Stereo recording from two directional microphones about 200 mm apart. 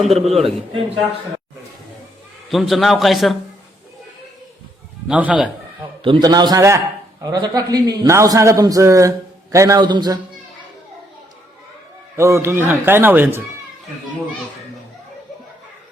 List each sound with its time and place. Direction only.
0.0 s a man's voice: centre (ahead or behind)
0.3 s a man's voice: 30° right (ahead or behind)
2.5 s a man's voice: centre (ahead or behind)
5.0 s a man's voice: 5° right (ahead or behind)
6.0 s a man's voice: 25° right (ahead or behind)
12.1 s a man's voice: 15° right (ahead or behind)